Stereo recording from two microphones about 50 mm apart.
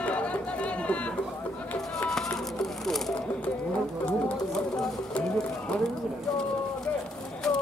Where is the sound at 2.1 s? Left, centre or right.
Centre.